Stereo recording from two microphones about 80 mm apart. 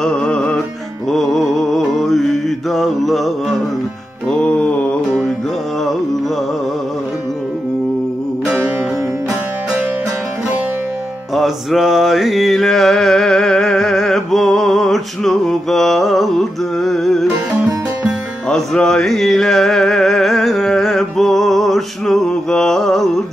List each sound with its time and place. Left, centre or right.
0.0 s music: centre
1.8 s mantra: centre
4.3 s music: centre
11.3 s mantra: centre
18.5 s music: centre